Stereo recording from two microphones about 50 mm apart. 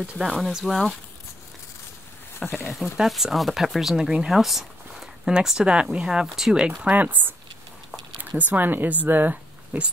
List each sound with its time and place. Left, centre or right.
0.2 s speech: centre
2.3 s speech: left
2.7 s speech: centre
4.3 s a sound: centre
5.3 s speech: centre
6.2 s speech: centre
6.5 s speech: centre
6.9 s speech: right